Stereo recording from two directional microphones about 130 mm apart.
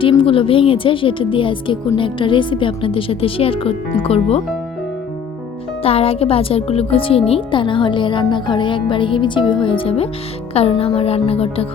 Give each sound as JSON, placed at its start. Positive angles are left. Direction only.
{"t": 0.0, "sound": "a woman's voice", "side_deg": 40}
{"t": 5.8, "sound": "a woman's voice", "side_deg": 50}